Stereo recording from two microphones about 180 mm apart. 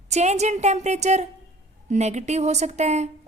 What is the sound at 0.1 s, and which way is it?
Speech, 40° right (ahead or behind).